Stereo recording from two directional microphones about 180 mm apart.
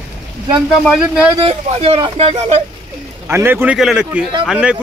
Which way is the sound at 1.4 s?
35° right (ahead or behind).